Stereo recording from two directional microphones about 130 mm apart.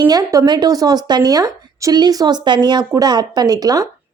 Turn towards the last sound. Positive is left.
turn(degrees=-30)  # may be behind; listen again after turning